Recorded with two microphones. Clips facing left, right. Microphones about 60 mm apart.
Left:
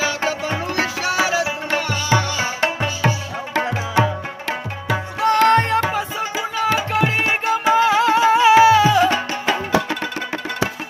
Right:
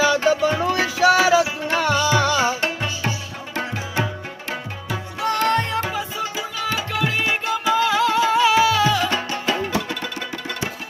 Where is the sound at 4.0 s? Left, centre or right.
Left.